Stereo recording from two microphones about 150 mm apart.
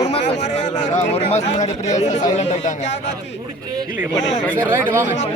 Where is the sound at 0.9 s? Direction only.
45° left (ahead or behind).